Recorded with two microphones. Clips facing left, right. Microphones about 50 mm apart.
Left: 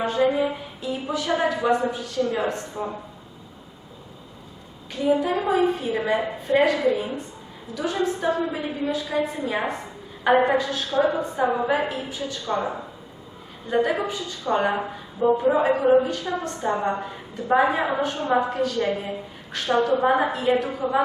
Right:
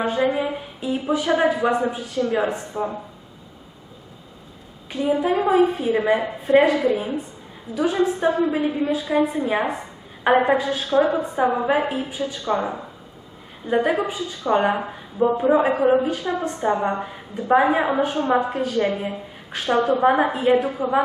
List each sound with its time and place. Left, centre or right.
0.2 s a woman's voice: right
4.9 s a woman's voice: centre